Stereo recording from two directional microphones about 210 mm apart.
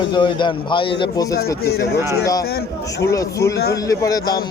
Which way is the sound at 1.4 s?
50° left (ahead or behind).